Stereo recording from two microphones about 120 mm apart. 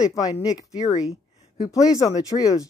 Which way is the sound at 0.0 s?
30° left (ahead or behind).